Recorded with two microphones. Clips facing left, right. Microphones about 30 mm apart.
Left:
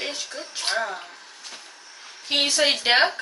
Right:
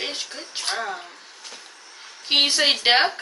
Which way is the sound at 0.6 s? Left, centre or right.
Centre.